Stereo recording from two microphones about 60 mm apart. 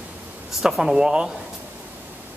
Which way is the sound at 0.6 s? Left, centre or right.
Centre.